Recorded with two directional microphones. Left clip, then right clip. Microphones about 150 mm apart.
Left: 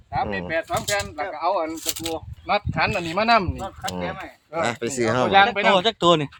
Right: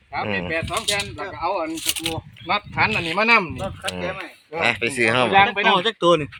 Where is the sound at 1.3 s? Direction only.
20° left (ahead or behind).